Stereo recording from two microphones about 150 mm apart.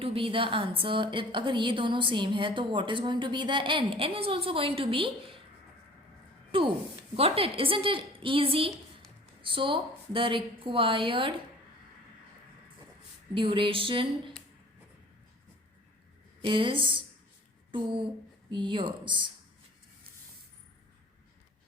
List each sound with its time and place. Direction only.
0.0 s a woman's voice: 40° right (ahead or behind)
7.2 s a woman's voice: 40° right (ahead or behind)
13.3 s a woman's voice: 35° right (ahead or behind)
16.4 s a woman's voice: 35° right (ahead or behind)
17.7 s a sound: 35° right (ahead or behind)
18.5 s a woman's voice: 30° right (ahead or behind)